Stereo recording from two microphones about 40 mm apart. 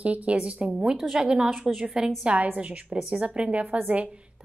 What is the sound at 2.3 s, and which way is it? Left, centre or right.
A woman's voice, right.